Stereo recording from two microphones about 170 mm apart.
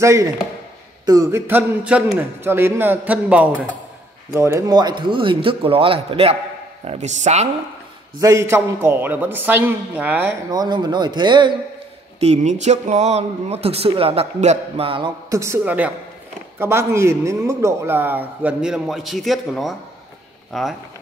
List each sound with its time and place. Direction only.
0.0 s a man's voice: 15° right (ahead or behind)
1.5 s a man's voice: 5° right (ahead or behind); by 7.4 s 40° right (ahead or behind)
8.2 s a man's voice: 20° right (ahead or behind)
10.5 s speech: 25° right (ahead or behind)
12.2 s a man's voice: 40° right (ahead or behind)
15.2 s a man's voice: 15° right (ahead or behind); by 20.7 s centre (ahead or behind)